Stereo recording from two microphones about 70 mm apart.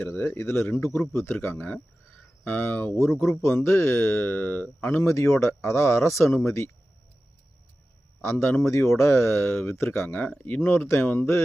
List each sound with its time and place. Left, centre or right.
0.0 s speech: left
8.2 s speech: left